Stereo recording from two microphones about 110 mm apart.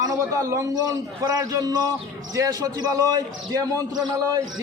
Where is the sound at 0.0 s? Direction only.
30° right (ahead or behind).